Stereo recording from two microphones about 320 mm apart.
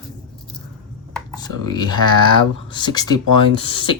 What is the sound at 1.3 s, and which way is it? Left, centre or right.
Speech, centre.